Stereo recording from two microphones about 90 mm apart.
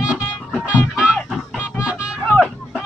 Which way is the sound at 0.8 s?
15° left (ahead or behind).